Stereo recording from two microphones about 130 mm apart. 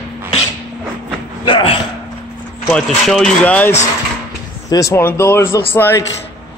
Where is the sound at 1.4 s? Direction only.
40° left (ahead or behind).